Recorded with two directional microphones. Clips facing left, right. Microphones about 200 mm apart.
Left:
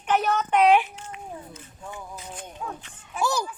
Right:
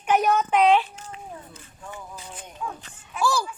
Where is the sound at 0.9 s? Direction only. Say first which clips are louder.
Left 1 dB; 35° right (ahead or behind).